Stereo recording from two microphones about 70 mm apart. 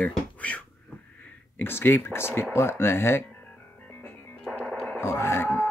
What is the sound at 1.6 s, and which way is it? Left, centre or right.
Speech, left.